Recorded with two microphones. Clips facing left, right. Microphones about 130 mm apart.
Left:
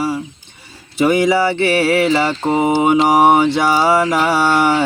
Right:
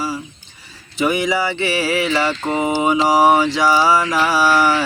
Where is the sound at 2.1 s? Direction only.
35° left (ahead or behind).